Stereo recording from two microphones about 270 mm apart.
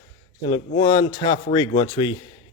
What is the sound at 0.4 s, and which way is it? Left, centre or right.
A man's voice, centre.